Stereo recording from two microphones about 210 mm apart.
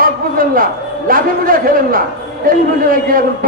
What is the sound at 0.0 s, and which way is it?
A man's voice, 40° right (ahead or behind).